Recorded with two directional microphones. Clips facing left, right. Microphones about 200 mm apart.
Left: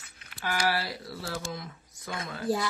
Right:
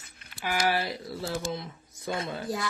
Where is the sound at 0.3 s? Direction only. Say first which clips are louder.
Right 2 dB; 15° right (ahead or behind).